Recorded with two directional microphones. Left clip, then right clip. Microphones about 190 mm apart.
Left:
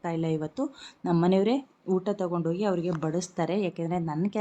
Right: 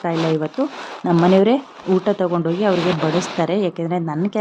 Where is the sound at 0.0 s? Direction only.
5° right (ahead or behind).